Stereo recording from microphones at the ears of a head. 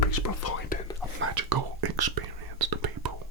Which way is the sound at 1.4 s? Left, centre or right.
Right.